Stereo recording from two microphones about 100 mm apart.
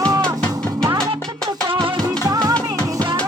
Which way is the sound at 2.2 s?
40° right (ahead or behind).